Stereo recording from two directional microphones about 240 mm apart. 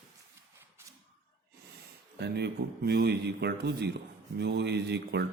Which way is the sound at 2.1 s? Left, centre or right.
Right.